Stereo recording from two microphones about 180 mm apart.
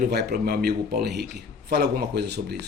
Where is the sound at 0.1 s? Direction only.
65° right (ahead or behind).